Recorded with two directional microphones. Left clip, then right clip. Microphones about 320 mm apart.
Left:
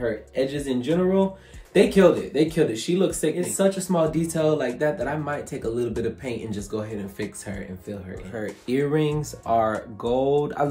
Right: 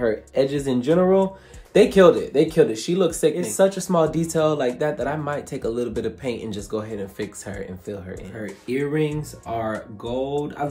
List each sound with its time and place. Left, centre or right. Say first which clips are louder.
0.0 s speech: right 4 dB; centre
8.6 s speech: even; centre